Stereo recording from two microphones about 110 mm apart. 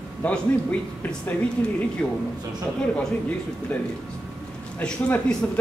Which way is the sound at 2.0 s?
10° left (ahead or behind).